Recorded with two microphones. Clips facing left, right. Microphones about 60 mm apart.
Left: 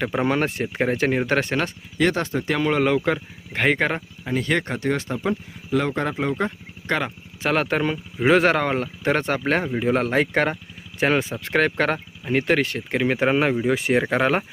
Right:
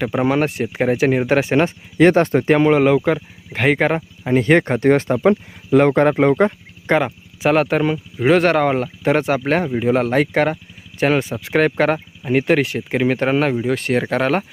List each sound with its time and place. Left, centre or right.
0.0 s speech: centre
1.5 s speech: right
2.6 s speech: centre
4.2 s speech: right
6.8 s speech: centre
7.4 s speech: centre